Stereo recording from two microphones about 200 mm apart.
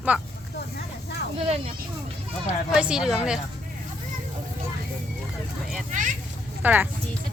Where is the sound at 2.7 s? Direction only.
5° right (ahead or behind).